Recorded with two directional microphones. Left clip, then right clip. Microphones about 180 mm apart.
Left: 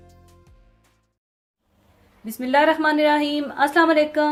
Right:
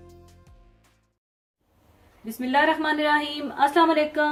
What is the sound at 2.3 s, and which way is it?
Speech, 55° left (ahead or behind).